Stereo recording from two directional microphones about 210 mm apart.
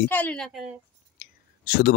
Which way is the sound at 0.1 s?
5° left (ahead or behind).